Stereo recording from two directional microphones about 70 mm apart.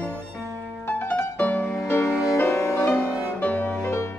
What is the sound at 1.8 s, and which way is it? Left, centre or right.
Music, left.